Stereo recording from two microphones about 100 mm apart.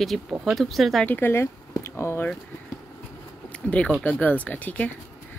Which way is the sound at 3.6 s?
15° left (ahead or behind).